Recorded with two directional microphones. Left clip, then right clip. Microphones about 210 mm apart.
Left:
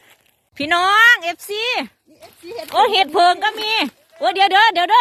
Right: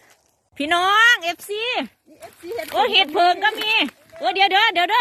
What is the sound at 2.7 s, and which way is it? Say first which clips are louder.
A woman's voice: left 3 dB; 20° left (ahead or behind).